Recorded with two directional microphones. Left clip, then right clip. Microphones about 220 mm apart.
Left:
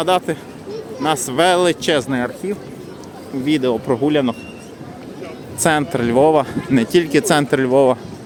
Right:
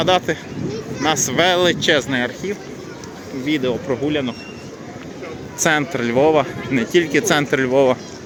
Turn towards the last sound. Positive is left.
turn(degrees=20)  # may be behind; listen again after turning